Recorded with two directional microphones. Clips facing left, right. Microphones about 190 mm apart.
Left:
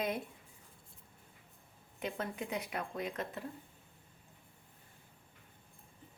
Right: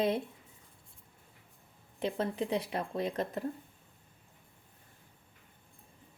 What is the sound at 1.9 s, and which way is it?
Speech, 30° right (ahead or behind).